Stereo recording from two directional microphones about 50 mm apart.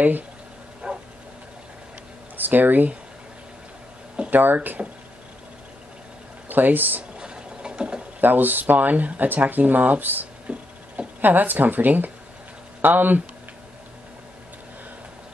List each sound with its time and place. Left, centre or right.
0.8 s dog: centre
2.3 s speech: right
4.3 s speech: right
4.8 s speech: centre
6.5 s speech: right
7.2 s a sound: centre
8.2 s speech: right
10.5 s a sound: right
11.1 s speech: right